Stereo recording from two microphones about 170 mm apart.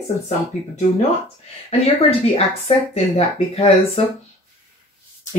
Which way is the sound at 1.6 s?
35° left (ahead or behind).